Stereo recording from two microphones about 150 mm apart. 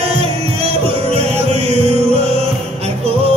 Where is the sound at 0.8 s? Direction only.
45° right (ahead or behind).